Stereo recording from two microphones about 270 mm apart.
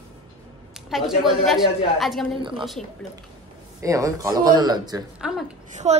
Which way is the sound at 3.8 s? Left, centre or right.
Centre.